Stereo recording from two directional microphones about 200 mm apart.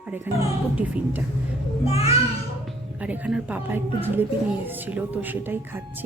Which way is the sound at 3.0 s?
5° right (ahead or behind).